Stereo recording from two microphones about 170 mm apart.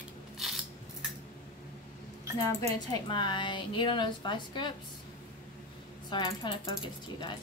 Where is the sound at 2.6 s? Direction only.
25° left (ahead or behind).